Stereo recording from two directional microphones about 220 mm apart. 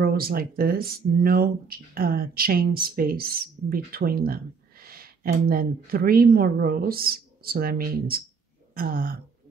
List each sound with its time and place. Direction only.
0.0 s speech: 45° right (ahead or behind)
8.7 s throat clearing: 40° right (ahead or behind)